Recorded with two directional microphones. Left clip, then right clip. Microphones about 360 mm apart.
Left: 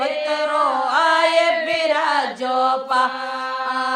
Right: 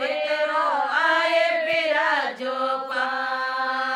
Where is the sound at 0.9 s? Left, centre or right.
Centre.